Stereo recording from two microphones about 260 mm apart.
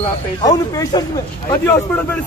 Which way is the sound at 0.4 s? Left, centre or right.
Centre.